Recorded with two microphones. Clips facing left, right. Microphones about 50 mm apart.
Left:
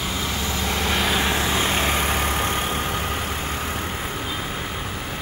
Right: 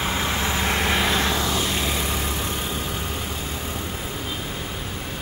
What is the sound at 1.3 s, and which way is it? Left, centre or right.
Vehicle, left.